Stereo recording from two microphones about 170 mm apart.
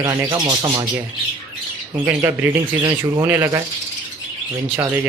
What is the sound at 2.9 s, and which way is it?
Speech, 15° right (ahead or behind).